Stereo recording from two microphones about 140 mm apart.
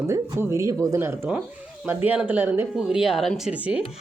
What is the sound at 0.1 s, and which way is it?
Speech, 20° right (ahead or behind).